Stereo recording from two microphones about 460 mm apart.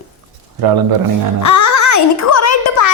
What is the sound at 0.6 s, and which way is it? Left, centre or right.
Speech, right.